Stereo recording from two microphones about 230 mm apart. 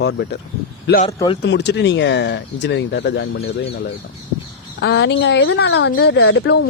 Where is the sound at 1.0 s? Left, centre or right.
Left.